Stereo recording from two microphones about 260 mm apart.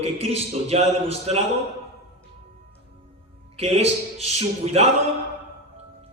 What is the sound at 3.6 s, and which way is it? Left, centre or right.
A man's voice, right.